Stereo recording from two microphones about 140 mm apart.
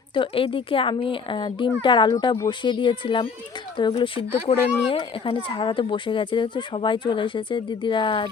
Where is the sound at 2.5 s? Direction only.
35° left (ahead or behind).